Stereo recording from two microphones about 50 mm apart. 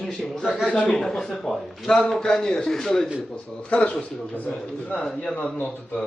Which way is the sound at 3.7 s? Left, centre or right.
Left.